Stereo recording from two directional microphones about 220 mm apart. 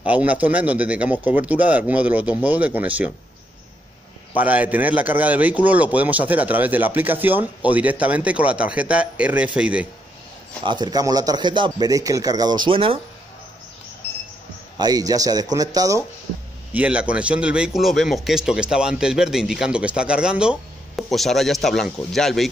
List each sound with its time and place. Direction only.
0.0 s a man's voice: 5° right (ahead or behind)
4.4 s a man's voice: 5° right (ahead or behind)
10.6 s speech: 20° right (ahead or behind)
14.8 s a man's voice: 15° right (ahead or behind)
16.7 s a man's voice: 5° right (ahead or behind)